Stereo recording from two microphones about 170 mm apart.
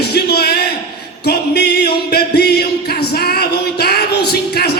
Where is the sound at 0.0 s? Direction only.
70° left (ahead or behind).